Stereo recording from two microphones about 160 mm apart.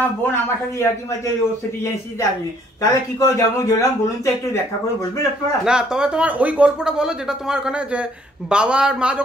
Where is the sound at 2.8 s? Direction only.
20° left (ahead or behind).